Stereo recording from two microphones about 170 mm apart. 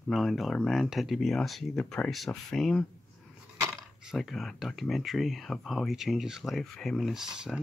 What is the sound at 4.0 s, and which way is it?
Speech, centre (ahead or behind).